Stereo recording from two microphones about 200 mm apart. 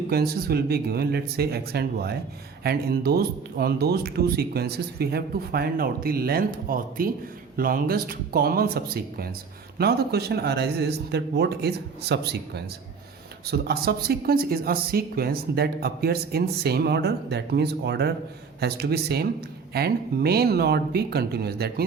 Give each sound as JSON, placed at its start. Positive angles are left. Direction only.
{"t": 0.1, "sound": "speech", "side_deg": -50}